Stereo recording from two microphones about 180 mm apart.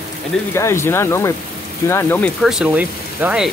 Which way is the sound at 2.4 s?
5° right (ahead or behind).